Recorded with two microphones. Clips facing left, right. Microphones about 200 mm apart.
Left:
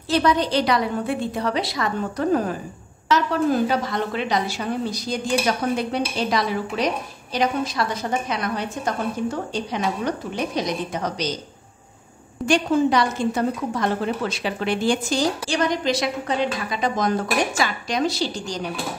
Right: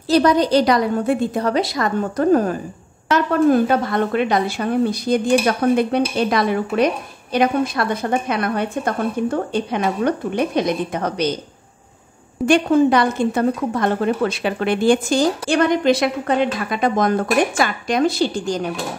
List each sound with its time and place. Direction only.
0.1 s a woman's voice: 40° right (ahead or behind); by 11.3 s 60° right (ahead or behind)
12.4 s a woman's voice: 55° right (ahead or behind)